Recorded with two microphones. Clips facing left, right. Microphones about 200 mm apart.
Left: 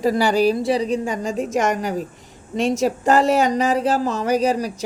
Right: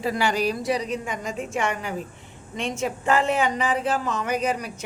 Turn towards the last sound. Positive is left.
turn(degrees=35)  # may be behind; listen again after turning